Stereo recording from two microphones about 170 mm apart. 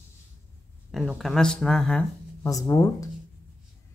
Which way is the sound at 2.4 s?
20° left (ahead or behind).